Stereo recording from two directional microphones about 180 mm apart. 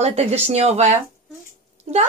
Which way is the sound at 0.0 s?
35° right (ahead or behind).